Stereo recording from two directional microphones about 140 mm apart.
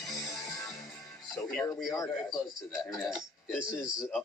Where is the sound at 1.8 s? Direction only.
20° left (ahead or behind).